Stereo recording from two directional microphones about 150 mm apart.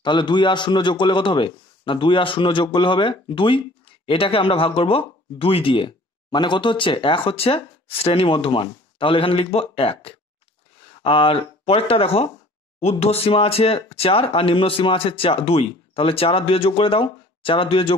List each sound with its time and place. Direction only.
0.0 s a man's voice: 30° left (ahead or behind)